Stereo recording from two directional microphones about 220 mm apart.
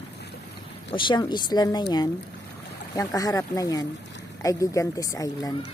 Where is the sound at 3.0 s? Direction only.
15° left (ahead or behind).